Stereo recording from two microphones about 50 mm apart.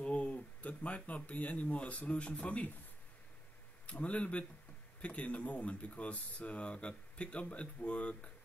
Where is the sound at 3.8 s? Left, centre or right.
Left.